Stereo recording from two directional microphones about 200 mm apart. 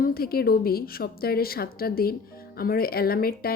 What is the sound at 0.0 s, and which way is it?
Speech, 50° left (ahead or behind).